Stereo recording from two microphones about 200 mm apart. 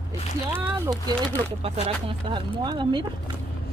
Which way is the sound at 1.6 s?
30° right (ahead or behind).